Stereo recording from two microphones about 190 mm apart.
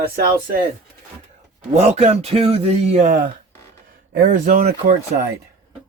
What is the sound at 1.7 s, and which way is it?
A man's voice, 35° right (ahead or behind).